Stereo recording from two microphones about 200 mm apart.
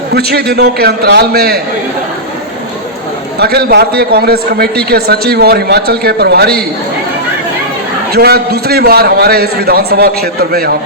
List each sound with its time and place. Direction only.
0.1 s a man's voice: 50° right (ahead or behind)
3.3 s a man's voice: 50° right (ahead or behind)
8.1 s a man's voice: 50° right (ahead or behind)